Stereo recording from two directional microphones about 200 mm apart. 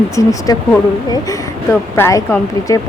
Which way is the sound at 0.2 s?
15° left (ahead or behind).